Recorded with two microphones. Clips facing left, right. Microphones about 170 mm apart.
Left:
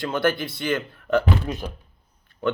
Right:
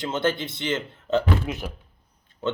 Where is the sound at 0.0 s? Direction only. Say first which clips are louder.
Left 2 dB; 20° right (ahead or behind).